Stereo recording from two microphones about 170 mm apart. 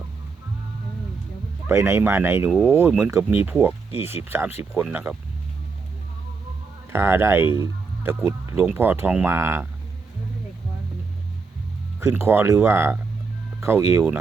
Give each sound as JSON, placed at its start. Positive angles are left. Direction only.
{"t": 1.6, "sound": "speech", "side_deg": -15}
{"t": 6.9, "sound": "speech", "side_deg": -15}
{"t": 11.9, "sound": "speech", "side_deg": -15}